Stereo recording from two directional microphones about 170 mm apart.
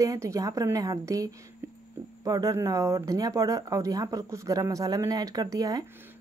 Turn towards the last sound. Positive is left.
turn(degrees=-20)  # may be behind; listen again after turning